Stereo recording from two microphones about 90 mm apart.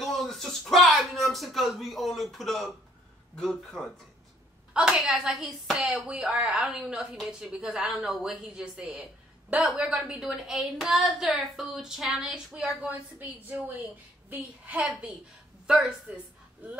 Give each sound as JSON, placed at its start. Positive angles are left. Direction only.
{"t": 0.0, "sound": "a sound", "side_deg": 5}
{"t": 3.3, "sound": "a woman's voice", "side_deg": 5}
{"t": 4.7, "sound": "a woman's voice", "side_deg": -10}
{"t": 12.8, "sound": "a woman's voice", "side_deg": -20}
{"t": 14.9, "sound": "a woman's voice", "side_deg": -5}